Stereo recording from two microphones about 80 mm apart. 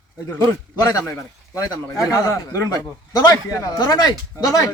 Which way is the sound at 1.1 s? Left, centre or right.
Left.